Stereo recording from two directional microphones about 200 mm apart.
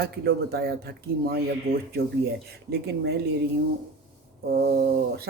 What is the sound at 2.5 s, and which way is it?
Speech, 55° right (ahead or behind).